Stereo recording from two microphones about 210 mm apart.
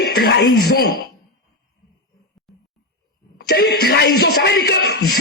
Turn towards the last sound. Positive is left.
turn(degrees=45)  # may be behind; listen again after turning